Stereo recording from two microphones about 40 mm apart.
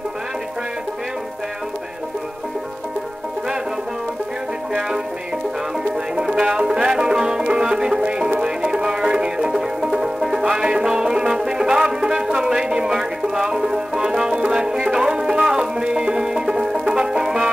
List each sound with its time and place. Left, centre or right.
4.7 s music: centre
6.1 s music: centre